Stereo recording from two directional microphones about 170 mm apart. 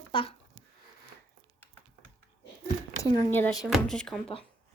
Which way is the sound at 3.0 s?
15° left (ahead or behind).